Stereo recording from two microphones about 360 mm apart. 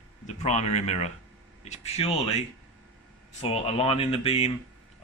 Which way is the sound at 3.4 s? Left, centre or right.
Centre.